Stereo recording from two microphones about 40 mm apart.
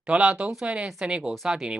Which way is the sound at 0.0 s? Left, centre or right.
Right.